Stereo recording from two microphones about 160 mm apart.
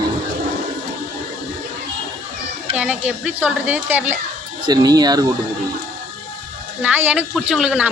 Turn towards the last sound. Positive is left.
turn(degrees=-5)  # may be behind; listen again after turning